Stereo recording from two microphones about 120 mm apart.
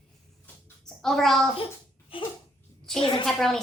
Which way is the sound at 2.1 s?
45° left (ahead or behind).